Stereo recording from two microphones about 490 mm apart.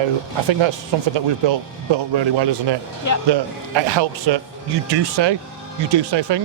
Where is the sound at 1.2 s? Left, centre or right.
Right.